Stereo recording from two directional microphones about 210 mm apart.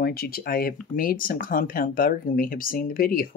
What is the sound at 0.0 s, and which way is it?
Speech, 45° left (ahead or behind).